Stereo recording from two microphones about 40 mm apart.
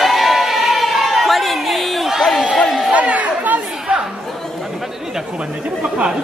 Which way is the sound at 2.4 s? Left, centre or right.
Left.